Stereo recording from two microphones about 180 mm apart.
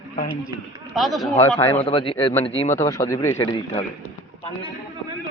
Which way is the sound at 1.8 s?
30° left (ahead or behind).